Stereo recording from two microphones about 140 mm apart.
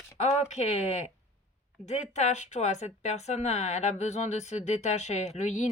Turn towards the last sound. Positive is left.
turn(degrees=55)  # may be behind; listen again after turning